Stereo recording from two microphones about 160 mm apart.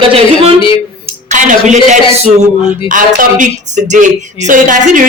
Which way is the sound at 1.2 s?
50° right (ahead or behind).